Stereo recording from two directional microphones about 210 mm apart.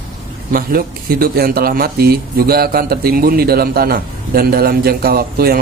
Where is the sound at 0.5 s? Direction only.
45° right (ahead or behind).